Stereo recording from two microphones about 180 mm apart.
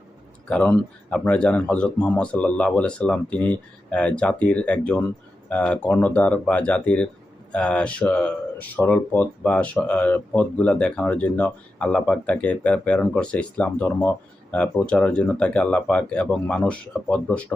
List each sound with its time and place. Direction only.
0.4 s speech: 5° left (ahead or behind)